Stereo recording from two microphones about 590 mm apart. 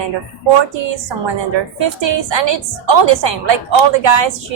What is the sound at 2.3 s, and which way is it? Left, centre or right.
A woman's voice, right.